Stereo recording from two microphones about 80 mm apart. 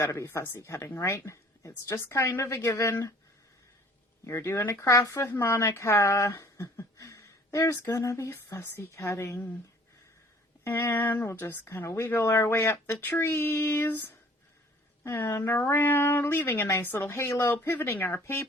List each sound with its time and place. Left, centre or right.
0.0 s speech: left
4.3 s speech: left
10.6 s speech: left